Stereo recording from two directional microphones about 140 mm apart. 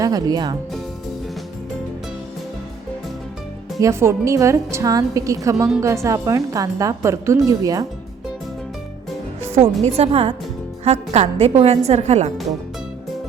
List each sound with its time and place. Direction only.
0.0 s a woman's voice: 25° right (ahead or behind)
3.8 s a woman's voice: 20° right (ahead or behind)
9.8 s a woman's voice: 45° right (ahead or behind)